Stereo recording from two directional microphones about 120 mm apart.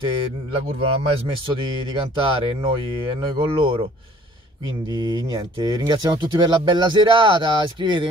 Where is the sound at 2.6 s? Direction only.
45° right (ahead or behind).